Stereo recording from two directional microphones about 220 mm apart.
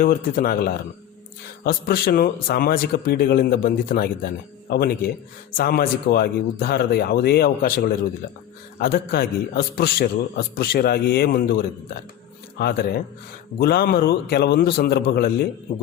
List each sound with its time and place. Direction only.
0.0 s a man's voice: 40° left (ahead or behind)